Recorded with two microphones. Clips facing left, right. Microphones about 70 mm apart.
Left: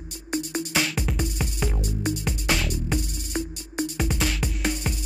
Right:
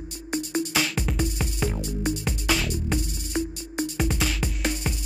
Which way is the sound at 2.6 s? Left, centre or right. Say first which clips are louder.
Even; centre.